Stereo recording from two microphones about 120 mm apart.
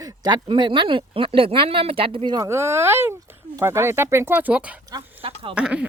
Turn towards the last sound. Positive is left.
turn(degrees=-10)  # may be behind; listen again after turning